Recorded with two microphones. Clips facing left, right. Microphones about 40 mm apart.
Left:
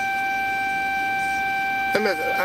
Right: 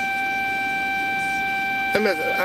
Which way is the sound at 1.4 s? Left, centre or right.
Centre.